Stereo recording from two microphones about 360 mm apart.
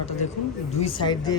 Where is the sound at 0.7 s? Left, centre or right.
Centre.